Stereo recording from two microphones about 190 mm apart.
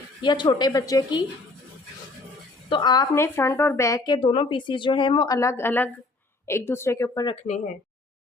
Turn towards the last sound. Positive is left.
turn(degrees=40)  # may be behind; listen again after turning